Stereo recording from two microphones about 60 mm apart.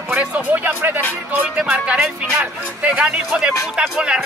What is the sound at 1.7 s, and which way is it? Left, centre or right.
Speech, right.